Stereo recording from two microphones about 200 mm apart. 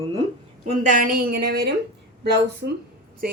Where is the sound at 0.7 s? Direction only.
40° right (ahead or behind).